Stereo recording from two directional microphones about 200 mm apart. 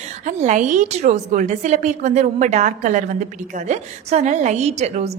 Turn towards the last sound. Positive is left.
turn(degrees=-35)  # may be behind; listen again after turning